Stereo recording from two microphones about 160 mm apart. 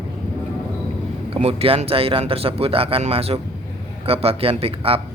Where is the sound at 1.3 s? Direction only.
40° right (ahead or behind).